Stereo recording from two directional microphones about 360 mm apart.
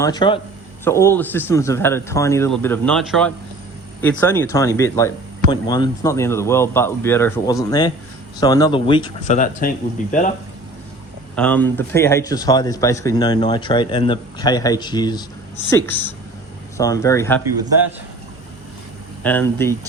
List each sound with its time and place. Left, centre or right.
0.0 s a man's voice: centre
11.3 s a man's voice: centre
19.2 s speech: centre